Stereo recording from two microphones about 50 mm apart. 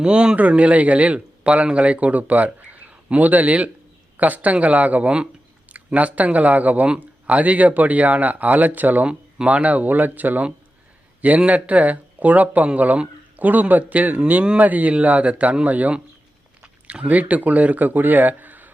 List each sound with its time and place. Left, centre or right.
0.0 s a man's voice: centre; by 18.7 s right